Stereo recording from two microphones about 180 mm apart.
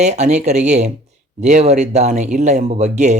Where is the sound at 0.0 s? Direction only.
40° right (ahead or behind).